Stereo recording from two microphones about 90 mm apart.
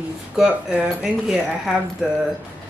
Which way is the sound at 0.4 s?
10° right (ahead or behind).